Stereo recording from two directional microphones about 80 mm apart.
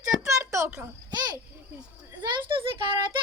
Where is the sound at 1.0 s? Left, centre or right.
Right.